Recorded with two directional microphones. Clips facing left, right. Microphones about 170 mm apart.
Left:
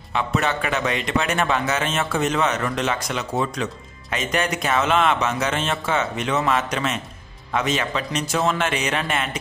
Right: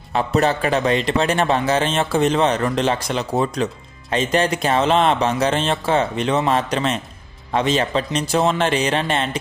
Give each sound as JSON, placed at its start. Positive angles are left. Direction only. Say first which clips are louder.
{"t": 0.1, "sound": "a man's voice", "louder": "right 5 dB", "side_deg": -35}